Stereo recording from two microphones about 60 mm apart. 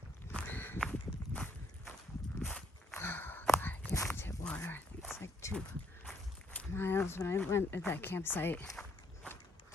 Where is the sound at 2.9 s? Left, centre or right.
Left.